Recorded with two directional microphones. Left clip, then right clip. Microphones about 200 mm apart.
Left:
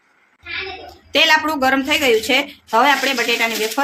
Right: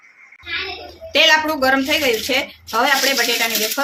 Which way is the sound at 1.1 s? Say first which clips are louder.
Even; 35° left (ahead or behind).